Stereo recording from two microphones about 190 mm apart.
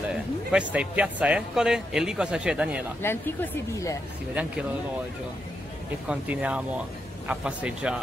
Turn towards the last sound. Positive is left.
turn(degrees=-5)  # may be behind; listen again after turning